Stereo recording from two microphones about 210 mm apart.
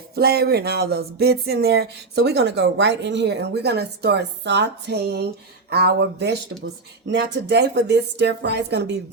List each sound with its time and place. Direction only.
0.2 s speech: 45° right (ahead or behind)